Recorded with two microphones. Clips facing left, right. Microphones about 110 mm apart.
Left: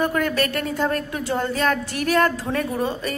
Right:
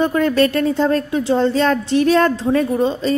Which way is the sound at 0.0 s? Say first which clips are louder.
Right 6 dB; 30° right (ahead or behind).